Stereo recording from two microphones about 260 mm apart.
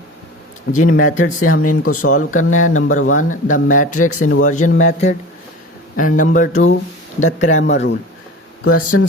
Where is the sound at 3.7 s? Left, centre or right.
Left.